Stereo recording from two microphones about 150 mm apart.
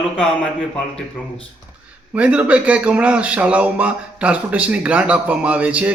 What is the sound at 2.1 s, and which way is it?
Speech, 10° right (ahead or behind).